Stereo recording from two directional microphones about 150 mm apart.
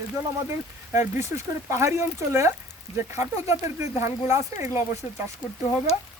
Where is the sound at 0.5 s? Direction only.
15° right (ahead or behind).